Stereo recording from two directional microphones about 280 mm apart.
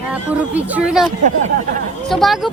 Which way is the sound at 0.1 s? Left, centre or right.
Centre.